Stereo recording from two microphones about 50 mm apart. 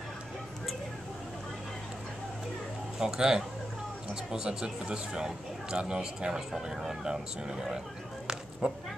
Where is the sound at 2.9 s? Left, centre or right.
Centre.